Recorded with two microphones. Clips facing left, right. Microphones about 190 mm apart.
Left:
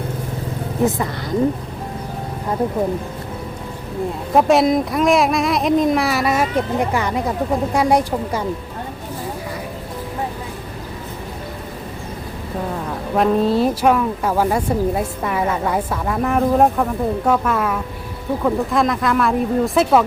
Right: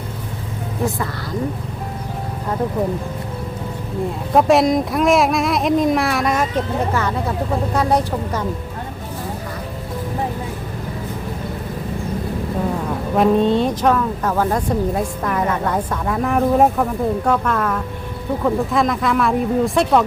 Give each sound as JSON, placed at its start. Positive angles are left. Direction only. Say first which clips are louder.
{"t": 4.4, "sound": "speech", "louder": "even", "side_deg": 0}
{"t": 13.1, "sound": "speech", "louder": "right 1 dB", "side_deg": 0}